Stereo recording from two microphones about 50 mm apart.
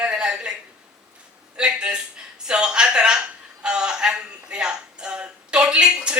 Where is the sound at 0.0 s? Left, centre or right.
Centre.